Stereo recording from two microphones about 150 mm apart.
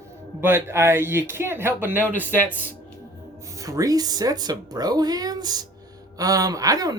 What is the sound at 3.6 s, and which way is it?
Speech, 20° right (ahead or behind).